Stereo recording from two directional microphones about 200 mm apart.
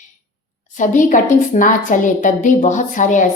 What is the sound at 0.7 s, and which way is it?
A woman's voice, 40° left (ahead or behind).